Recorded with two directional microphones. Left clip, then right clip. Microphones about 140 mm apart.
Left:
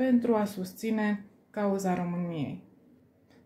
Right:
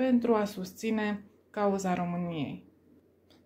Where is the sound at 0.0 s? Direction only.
35° right (ahead or behind).